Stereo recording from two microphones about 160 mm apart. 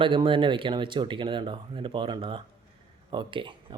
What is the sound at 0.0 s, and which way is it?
Speech, 30° right (ahead or behind).